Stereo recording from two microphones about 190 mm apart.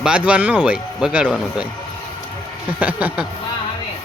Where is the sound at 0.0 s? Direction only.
5° right (ahead or behind).